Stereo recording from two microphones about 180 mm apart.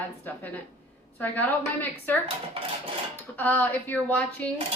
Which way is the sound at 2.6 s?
30° right (ahead or behind).